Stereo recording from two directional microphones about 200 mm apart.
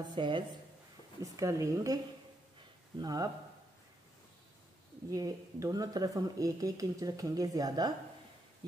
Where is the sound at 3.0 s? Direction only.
20° right (ahead or behind).